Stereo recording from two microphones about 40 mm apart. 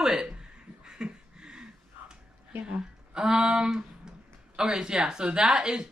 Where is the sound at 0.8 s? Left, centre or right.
Centre.